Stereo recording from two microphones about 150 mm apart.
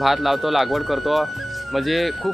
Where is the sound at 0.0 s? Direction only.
Centre (ahead or behind).